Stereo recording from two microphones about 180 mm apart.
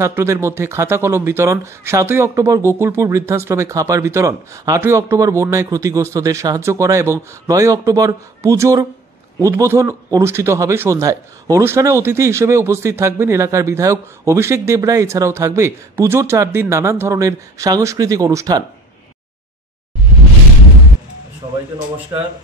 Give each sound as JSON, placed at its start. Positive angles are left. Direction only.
{"t": 0.0, "sound": "a man's voice", "side_deg": -15}
{"t": 22.1, "sound": "speech", "side_deg": -30}